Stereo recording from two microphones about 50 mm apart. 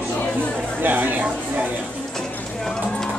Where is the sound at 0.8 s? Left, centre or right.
Right.